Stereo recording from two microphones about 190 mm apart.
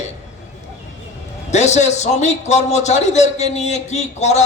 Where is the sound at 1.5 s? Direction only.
35° left (ahead or behind).